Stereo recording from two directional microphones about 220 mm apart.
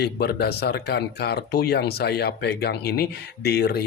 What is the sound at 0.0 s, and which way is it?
Speech, 45° left (ahead or behind).